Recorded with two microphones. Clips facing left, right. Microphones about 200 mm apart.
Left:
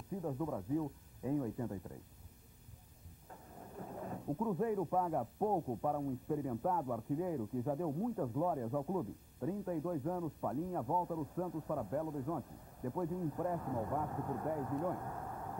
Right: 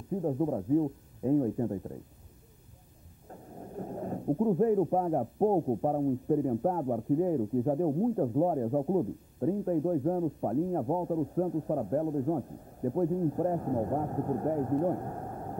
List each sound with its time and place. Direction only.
0.2 s speech: 40° right (ahead or behind)
3.3 s speech: 40° right (ahead or behind)